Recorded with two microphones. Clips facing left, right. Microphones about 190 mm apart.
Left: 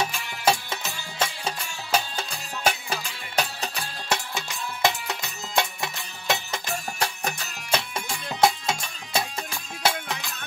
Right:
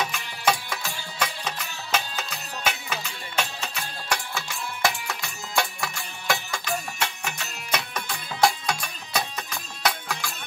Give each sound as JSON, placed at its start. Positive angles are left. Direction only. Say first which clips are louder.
{"t": 0.0, "sound": "music", "louder": "left 1 dB", "side_deg": 25}
{"t": 4.1, "sound": "music", "louder": "left 1 dB", "side_deg": 20}
{"t": 7.0, "sound": "music", "louder": "left 2 dB", "side_deg": 35}